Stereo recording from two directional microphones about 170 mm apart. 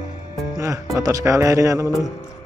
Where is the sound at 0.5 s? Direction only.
20° right (ahead or behind).